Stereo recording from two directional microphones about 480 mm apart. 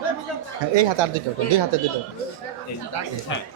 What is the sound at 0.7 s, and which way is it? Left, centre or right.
Speech, right.